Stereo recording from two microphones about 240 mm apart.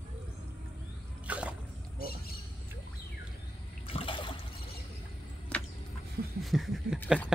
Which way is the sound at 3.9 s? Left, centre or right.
Left.